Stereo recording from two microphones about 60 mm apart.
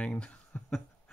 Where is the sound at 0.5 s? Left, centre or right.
Left.